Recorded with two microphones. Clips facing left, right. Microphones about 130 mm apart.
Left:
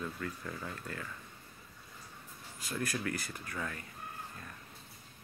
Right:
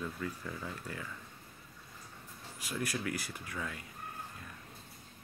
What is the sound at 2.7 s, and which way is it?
Speech, 10° right (ahead or behind).